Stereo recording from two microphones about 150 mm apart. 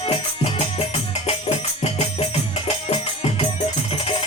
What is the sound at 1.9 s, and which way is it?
Music, 45° left (ahead or behind).